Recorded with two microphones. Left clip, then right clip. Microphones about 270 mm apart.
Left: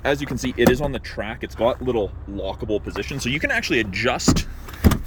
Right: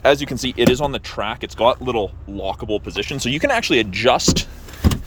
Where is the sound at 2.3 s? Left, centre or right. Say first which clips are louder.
Right 3 dB; right.